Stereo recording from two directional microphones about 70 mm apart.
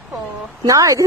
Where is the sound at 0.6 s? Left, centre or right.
Right.